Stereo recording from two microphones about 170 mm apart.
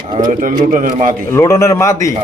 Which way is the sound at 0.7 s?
50° right (ahead or behind).